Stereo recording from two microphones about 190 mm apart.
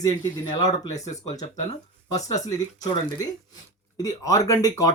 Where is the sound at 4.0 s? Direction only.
15° left (ahead or behind).